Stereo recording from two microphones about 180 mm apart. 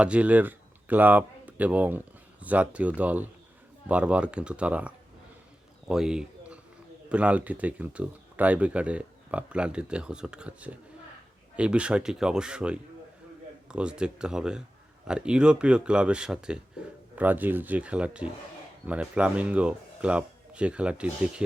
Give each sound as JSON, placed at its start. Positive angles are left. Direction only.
{"t": 0.0, "sound": "speech", "side_deg": -5}
{"t": 5.9, "sound": "speech", "side_deg": -5}